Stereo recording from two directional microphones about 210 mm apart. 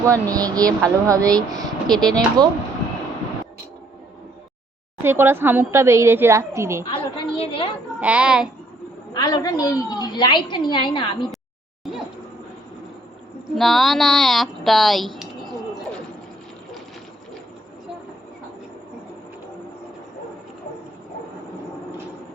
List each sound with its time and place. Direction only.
0.0 s speech: 15° right (ahead or behind)
5.0 s speech: 10° right (ahead or behind)
6.9 s a woman's voice: 25° left (ahead or behind)
8.0 s speech: 5° right (ahead or behind)
9.1 s a woman's voice: 20° left (ahead or behind)
13.6 s speech: centre (ahead or behind)